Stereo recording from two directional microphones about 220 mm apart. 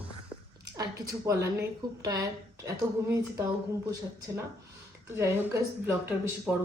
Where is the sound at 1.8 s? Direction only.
20° right (ahead or behind).